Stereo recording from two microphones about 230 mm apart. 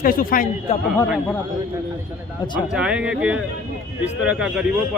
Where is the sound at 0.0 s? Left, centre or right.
Left.